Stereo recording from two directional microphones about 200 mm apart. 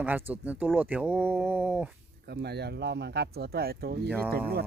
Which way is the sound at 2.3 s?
55° right (ahead or behind).